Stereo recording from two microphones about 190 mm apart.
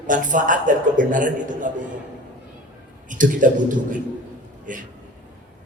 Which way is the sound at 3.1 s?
45° right (ahead or behind).